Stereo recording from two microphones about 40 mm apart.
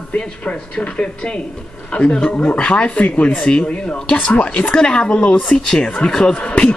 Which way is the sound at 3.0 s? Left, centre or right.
Left.